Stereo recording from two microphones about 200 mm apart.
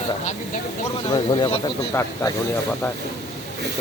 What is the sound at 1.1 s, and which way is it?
Speech, 25° left (ahead or behind).